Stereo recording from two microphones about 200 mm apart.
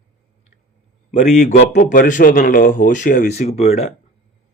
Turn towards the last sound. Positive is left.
turn(degrees=30)  # may be behind; listen again after turning